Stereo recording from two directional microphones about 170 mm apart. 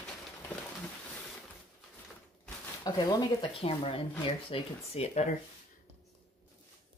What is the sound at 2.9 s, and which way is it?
Speech, 25° left (ahead or behind).